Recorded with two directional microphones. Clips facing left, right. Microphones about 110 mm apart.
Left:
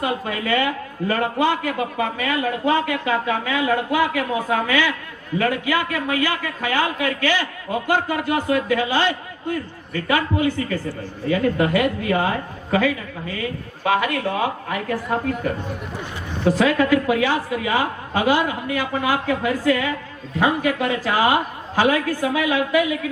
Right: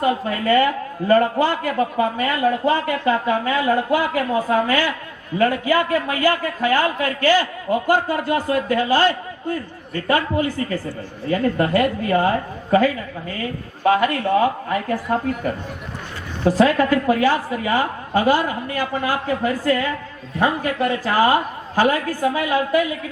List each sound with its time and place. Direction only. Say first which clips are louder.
0.0 s a man's voice: right 4 dB; 40° right (ahead or behind)
13.4 s a man's voice: right 5 dB; 40° right (ahead or behind)
16.4 s a man's voice: right 2 dB; 40° right (ahead or behind)